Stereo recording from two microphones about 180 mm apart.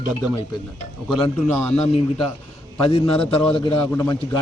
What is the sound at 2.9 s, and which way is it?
Speech, 30° left (ahead or behind).